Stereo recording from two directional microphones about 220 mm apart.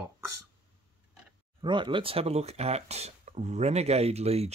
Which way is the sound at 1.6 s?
20° right (ahead or behind).